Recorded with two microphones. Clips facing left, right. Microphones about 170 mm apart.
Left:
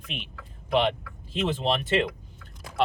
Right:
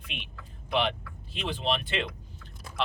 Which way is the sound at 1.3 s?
45° left (ahead or behind).